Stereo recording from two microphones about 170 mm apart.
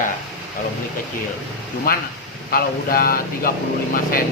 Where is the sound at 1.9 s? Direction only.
60° left (ahead or behind).